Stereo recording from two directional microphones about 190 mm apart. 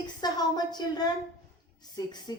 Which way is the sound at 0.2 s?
20° left (ahead or behind).